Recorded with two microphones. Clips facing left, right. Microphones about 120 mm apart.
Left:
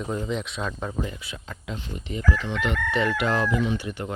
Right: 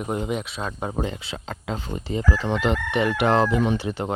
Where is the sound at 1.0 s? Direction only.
60° right (ahead or behind).